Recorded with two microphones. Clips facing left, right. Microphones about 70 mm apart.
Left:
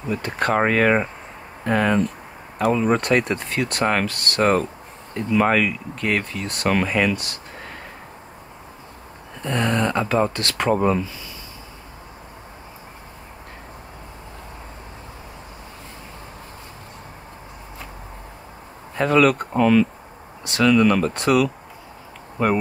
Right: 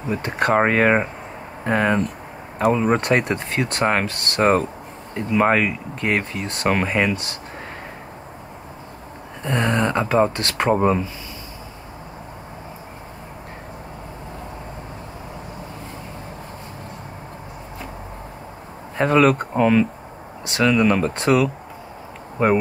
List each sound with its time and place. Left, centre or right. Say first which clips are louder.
0.1 s speech: right 2 dB; right
9.4 s speech: right 1 dB; right
18.9 s speech: right 1 dB; right